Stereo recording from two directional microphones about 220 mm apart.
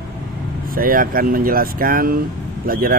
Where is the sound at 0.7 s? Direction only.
40° right (ahead or behind).